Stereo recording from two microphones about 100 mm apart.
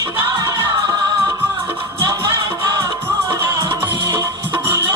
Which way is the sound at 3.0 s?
25° right (ahead or behind).